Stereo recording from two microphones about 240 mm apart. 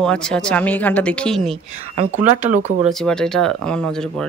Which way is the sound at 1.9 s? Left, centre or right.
Right.